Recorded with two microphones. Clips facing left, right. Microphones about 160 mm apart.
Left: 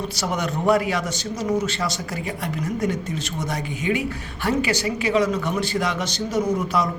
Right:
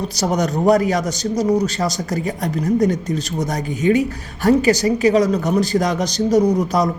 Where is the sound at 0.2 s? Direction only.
40° right (ahead or behind).